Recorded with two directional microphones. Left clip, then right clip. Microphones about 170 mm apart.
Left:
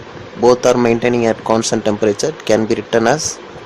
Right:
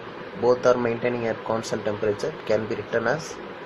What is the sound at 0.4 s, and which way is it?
Speech, 55° left (ahead or behind).